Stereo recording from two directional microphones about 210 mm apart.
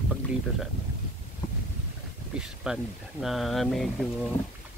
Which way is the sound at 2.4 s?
Centre (ahead or behind).